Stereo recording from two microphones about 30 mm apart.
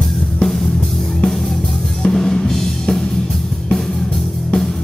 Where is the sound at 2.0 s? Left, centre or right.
Centre.